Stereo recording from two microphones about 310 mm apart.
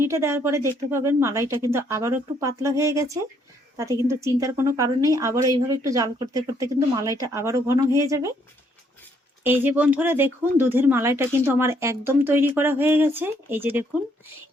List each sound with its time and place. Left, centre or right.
0.0 s a woman's voice: centre
9.4 s a woman's voice: centre